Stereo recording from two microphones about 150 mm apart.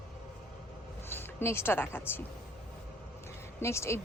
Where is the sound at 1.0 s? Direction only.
15° left (ahead or behind).